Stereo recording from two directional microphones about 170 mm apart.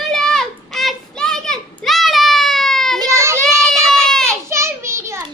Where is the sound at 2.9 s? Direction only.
20° right (ahead or behind).